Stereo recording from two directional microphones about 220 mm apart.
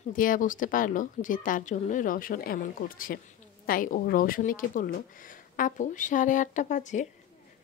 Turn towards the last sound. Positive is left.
turn(degrees=35)  # may be behind; listen again after turning